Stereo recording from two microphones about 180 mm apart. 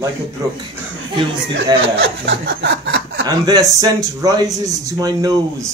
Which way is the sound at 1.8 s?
90° right.